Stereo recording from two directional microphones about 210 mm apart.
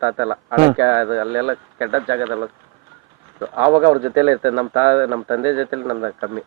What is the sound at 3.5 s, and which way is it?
A man's voice, 20° right (ahead or behind).